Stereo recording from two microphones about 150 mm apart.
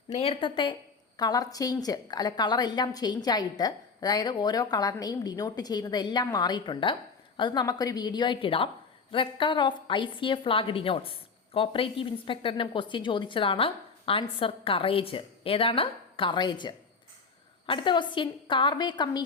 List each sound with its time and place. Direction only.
0.1 s a woman's voice: 40° left (ahead or behind)